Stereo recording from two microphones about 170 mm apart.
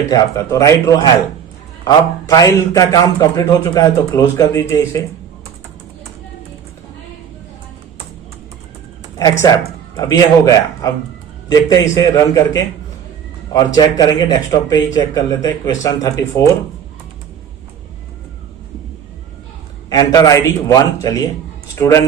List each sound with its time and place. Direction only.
0.1 s a man's voice: 20° left (ahead or behind)
10.0 s a man's voice: 20° left (ahead or behind)
13.5 s a man's voice: 20° left (ahead or behind)
19.9 s a man's voice: 20° left (ahead or behind)